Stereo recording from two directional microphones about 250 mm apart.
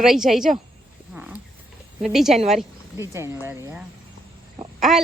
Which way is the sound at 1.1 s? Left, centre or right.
Centre.